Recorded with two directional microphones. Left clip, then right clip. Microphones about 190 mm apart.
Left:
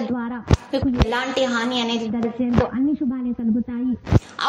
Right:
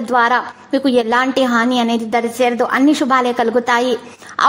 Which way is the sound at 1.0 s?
40° right (ahead or behind).